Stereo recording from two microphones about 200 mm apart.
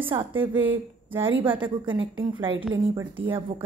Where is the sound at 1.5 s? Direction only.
25° right (ahead or behind).